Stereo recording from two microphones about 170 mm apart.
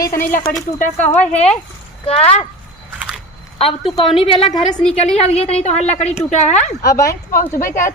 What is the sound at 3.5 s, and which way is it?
Speech, 35° left (ahead or behind).